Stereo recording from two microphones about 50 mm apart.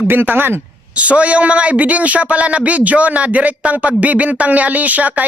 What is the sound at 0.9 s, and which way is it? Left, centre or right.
Speech, right.